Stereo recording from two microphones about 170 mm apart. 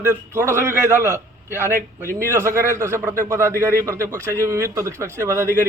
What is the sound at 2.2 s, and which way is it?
A man's voice, 15° right (ahead or behind).